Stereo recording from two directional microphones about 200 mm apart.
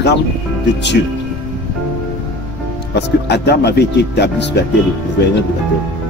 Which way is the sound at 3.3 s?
55° left (ahead or behind).